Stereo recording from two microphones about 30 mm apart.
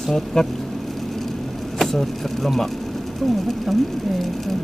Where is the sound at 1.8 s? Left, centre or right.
Centre.